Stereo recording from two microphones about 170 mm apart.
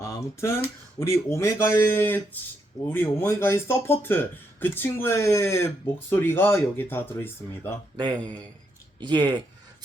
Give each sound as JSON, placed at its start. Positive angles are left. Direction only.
{"t": 0.0, "sound": "speech", "side_deg": 15}
{"t": 7.9, "sound": "a man's voice", "side_deg": -25}